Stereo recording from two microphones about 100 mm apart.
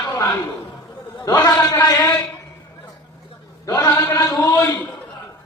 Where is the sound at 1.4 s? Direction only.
20° left (ahead or behind).